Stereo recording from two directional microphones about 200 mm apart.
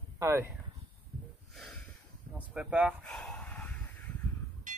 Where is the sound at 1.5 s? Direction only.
Centre (ahead or behind).